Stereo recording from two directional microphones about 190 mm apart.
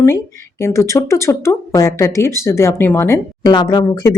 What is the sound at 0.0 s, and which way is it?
Speech, 15° left (ahead or behind).